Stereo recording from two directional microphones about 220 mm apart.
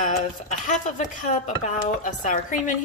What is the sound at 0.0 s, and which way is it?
Speech, 35° left (ahead or behind).